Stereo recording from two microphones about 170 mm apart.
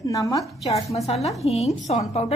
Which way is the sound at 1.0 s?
40° left (ahead or behind).